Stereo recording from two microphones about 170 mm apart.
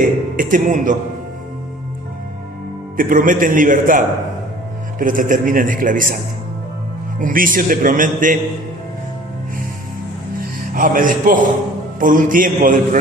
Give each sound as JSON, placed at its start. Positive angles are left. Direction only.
{"t": 0.3, "sound": "a man's voice", "side_deg": -50}
{"t": 3.0, "sound": "a man's voice", "side_deg": -50}
{"t": 7.2, "sound": "a man's voice", "side_deg": -55}
{"t": 10.8, "sound": "a man's voice", "side_deg": -55}